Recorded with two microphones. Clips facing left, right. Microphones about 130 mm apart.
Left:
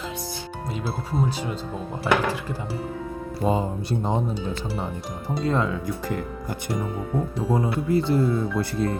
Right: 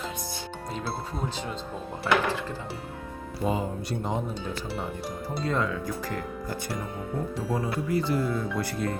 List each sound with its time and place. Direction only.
2.1 s music: 15° left (ahead or behind)
3.4 s speech: 30° left (ahead or behind)
5.5 s speech: 25° left (ahead or behind)
7.5 s speech: 25° left (ahead or behind)